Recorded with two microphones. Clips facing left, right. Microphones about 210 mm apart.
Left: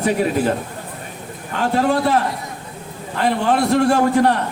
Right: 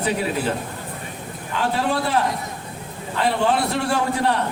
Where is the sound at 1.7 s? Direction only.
45° left (ahead or behind).